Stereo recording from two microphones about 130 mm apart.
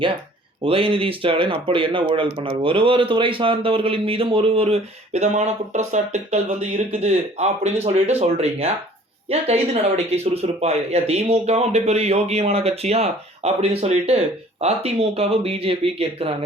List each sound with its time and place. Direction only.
0.6 s speech: 45° right (ahead or behind)
10.1 s speech: 55° right (ahead or behind)